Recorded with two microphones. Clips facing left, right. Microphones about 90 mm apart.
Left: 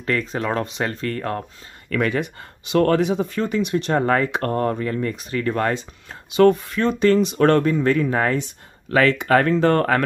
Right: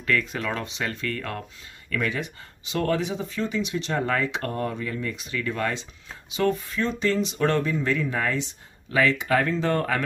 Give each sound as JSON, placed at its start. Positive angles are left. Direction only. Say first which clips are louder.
{"t": 0.0, "sound": "speech", "louder": "left 3 dB", "side_deg": 35}
{"t": 1.9, "sound": "speech", "louder": "left 6 dB", "side_deg": 55}
{"t": 6.3, "sound": "speech", "louder": "left 9 dB", "side_deg": 60}